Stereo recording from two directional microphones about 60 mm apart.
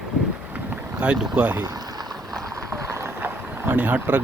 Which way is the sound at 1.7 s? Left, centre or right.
Right.